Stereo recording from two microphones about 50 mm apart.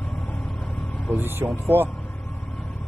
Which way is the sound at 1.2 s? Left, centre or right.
Right.